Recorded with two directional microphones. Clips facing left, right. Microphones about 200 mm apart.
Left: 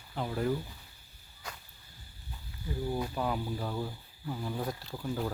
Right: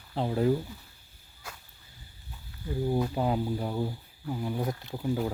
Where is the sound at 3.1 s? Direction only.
25° right (ahead or behind).